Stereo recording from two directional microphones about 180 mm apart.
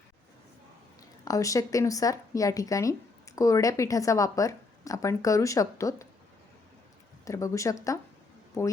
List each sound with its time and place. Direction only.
1.2 s speech: 20° left (ahead or behind)
7.3 s speech: 15° left (ahead or behind)